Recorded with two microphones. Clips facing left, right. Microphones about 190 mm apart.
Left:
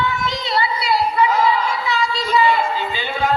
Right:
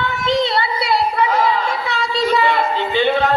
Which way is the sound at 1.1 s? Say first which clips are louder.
Even; 55° right (ahead or behind).